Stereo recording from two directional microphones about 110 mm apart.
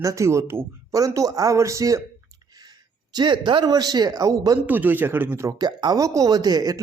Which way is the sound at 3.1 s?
45° right (ahead or behind).